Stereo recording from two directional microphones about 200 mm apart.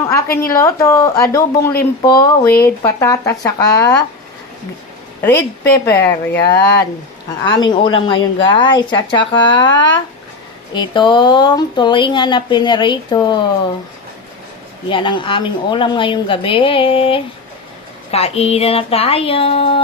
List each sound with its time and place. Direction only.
0.3 s a woman's voice: 15° left (ahead or behind)
5.7 s a woman's voice: 15° left (ahead or behind)
14.8 s a woman's voice: 25° left (ahead or behind)